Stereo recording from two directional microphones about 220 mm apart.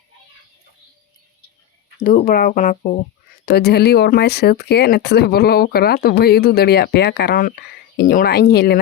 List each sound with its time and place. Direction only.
2.0 s speech: 35° left (ahead or behind)